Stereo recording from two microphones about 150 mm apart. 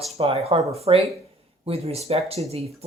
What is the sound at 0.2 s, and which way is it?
Speech, 40° right (ahead or behind).